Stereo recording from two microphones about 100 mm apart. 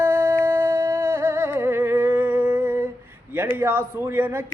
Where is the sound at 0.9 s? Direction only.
25° right (ahead or behind).